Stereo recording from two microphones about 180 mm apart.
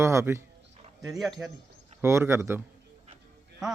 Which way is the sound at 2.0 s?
15° right (ahead or behind).